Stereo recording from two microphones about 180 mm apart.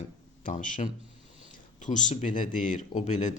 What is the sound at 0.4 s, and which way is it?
Speech, 45° left (ahead or behind).